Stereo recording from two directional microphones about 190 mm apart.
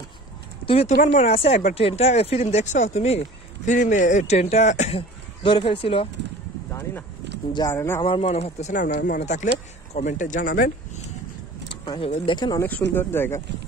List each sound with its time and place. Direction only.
0.7 s speech: 30° left (ahead or behind)
7.5 s speech: 15° left (ahead or behind)
8.0 s speech: 30° left (ahead or behind); by 10.7 s 45° left (ahead or behind)
11.8 s speech: 30° left (ahead or behind)
12.9 s speech: 10° left (ahead or behind)